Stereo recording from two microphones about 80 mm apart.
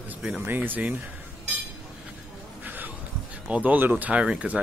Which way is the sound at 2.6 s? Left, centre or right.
Right.